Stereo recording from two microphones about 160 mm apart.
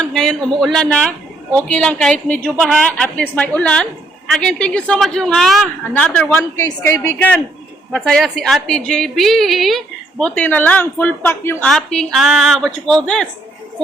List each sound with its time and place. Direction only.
0.0 s a woman's voice: 5° left (ahead or behind)